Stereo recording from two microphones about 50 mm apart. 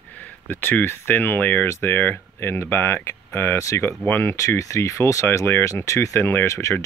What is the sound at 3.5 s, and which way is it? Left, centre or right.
Speech, left.